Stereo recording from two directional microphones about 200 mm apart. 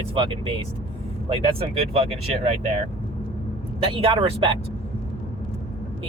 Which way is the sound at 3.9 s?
25° right (ahead or behind).